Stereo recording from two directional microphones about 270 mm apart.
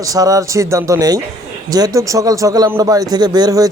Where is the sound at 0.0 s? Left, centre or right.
Centre.